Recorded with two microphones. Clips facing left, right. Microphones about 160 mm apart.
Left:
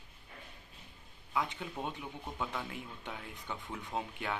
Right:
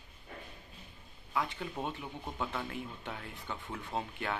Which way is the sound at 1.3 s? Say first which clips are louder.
Right 1 dB; 15° left (ahead or behind).